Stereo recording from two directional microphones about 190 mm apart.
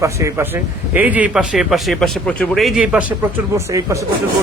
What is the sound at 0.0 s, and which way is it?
Speech, 15° right (ahead or behind).